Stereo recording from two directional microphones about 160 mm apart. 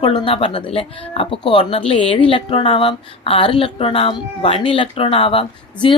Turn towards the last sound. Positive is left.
turn(degrees=35)  # may be behind; listen again after turning